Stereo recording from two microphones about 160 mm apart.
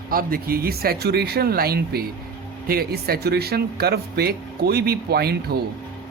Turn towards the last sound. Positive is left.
turn(degrees=-80)